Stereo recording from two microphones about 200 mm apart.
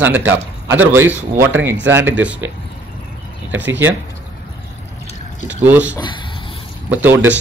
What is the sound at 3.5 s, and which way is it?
Speech, 65° right (ahead or behind).